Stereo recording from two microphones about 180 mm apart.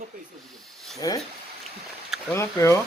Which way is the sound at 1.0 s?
20° left (ahead or behind).